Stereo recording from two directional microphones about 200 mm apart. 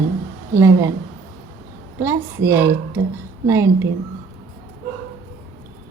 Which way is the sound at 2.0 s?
15° right (ahead or behind).